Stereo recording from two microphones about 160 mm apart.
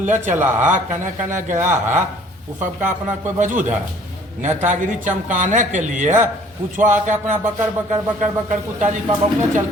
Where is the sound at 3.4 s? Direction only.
55° right (ahead or behind).